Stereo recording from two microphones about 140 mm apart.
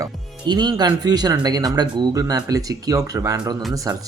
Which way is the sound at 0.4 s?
30° right (ahead or behind).